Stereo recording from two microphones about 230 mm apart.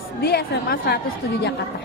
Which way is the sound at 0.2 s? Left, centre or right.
Left.